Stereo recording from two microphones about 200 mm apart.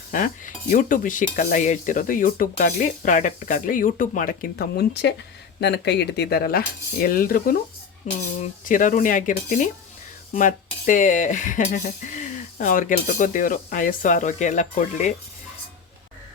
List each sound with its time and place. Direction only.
0.1 s cutlery: 40° left (ahead or behind)
5.5 s speech: 55° left (ahead or behind)
8.1 s cutlery: 40° left (ahead or behind)